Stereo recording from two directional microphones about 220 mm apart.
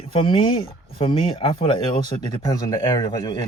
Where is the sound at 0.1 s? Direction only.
25° left (ahead or behind).